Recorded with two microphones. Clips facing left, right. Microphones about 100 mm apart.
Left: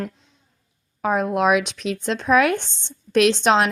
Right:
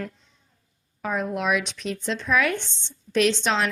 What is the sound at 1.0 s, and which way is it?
A woman's voice, 65° left (ahead or behind).